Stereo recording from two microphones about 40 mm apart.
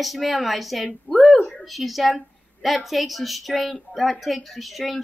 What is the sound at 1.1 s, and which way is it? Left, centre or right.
Speech, left.